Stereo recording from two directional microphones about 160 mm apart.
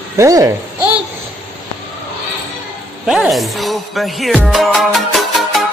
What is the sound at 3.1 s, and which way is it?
Music, centre (ahead or behind).